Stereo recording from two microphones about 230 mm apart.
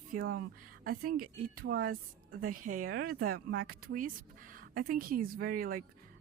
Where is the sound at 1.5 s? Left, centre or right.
Right.